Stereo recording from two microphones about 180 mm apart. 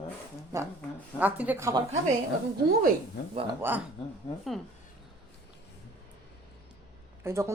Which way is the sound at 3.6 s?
10° right (ahead or behind).